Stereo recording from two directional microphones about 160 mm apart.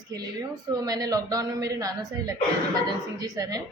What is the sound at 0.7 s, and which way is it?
Speech, 25° right (ahead or behind).